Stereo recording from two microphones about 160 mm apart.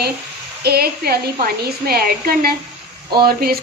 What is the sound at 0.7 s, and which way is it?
A woman's voice, 75° right (ahead or behind).